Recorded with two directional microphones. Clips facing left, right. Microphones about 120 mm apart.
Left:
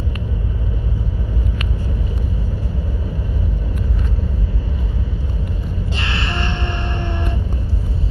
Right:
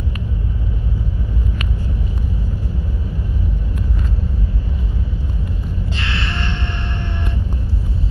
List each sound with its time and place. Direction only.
5.9 s gasp: 45° left (ahead or behind)